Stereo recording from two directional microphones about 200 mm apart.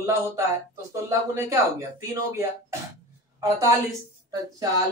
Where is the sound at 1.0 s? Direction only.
15° right (ahead or behind).